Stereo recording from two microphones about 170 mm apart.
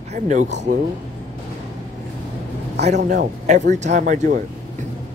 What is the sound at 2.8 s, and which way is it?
Speech, 45° right (ahead or behind).